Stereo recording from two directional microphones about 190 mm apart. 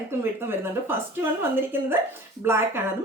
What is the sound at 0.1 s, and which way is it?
A woman's voice, 10° right (ahead or behind).